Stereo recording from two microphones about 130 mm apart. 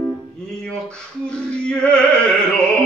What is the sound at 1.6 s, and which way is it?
Music, 5° left (ahead or behind).